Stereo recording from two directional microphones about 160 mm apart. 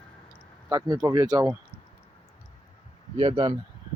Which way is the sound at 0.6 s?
20° right (ahead or behind).